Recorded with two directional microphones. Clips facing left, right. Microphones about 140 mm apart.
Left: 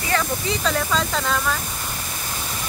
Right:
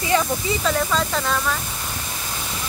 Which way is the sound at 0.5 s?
Centre (ahead or behind).